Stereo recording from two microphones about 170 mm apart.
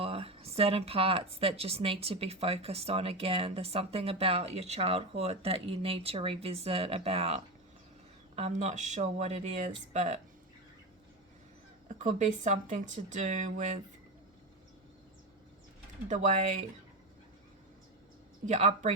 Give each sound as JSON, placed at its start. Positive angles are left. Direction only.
{"t": 0.0, "sound": "speech", "side_deg": -35}
{"t": 11.9, "sound": "speech", "side_deg": -45}
{"t": 16.0, "sound": "speech", "side_deg": -45}
{"t": 18.4, "sound": "speech", "side_deg": -45}